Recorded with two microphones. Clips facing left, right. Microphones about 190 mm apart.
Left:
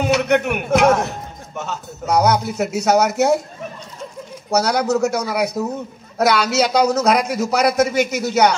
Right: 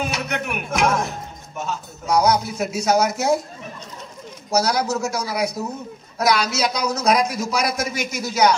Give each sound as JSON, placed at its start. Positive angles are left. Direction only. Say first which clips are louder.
{"t": 0.1, "sound": "a sound", "louder": "left 10 dB", "side_deg": 65}
{"t": 1.6, "sound": "speech", "louder": "left 1 dB", "side_deg": 65}
{"t": 4.5, "sound": "speech", "louder": "left 3 dB", "side_deg": 65}